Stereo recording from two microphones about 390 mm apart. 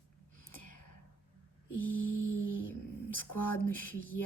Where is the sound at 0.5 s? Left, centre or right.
Left.